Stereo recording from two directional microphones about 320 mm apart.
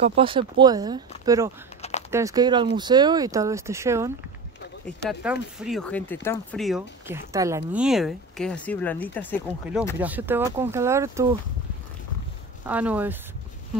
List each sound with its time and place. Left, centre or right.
0.0 s speech: centre
1.8 s a sound: left
2.0 s speech: centre
12.6 s speech: centre